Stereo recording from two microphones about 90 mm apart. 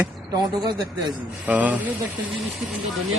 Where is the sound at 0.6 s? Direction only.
50° right (ahead or behind).